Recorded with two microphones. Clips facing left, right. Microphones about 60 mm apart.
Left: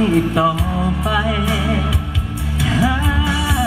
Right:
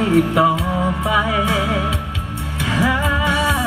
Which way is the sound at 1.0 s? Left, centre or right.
Centre.